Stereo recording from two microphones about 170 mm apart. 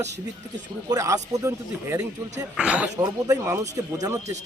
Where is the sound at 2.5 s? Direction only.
5° right (ahead or behind).